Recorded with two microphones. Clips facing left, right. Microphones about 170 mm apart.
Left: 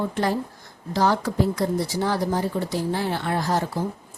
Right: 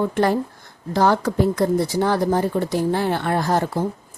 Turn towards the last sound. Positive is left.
turn(degrees=-55)  # may be behind; listen again after turning